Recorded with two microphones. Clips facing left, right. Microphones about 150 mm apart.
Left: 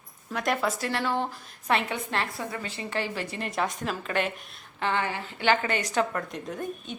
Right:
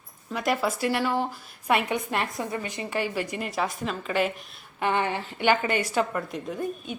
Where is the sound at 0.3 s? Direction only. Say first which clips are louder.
Right 1 dB; 5° right (ahead or behind).